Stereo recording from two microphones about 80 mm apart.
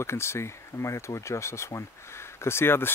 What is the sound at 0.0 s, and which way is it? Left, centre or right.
Speech, left.